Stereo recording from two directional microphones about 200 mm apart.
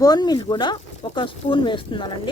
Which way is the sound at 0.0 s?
20° left (ahead or behind).